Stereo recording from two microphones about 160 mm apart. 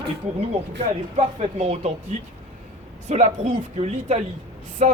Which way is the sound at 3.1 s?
45° right (ahead or behind).